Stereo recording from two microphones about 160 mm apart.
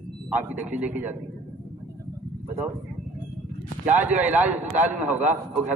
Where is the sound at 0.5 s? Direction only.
10° right (ahead or behind).